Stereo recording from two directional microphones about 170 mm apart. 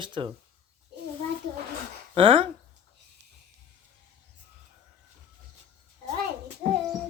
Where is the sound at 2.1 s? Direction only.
30° right (ahead or behind).